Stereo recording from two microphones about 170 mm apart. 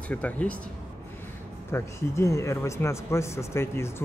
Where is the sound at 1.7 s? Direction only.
15° left (ahead or behind).